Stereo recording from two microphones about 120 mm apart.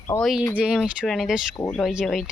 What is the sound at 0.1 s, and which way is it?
Speech, 25° left (ahead or behind).